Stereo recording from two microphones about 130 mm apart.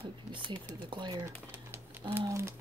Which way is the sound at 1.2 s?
20° right (ahead or behind).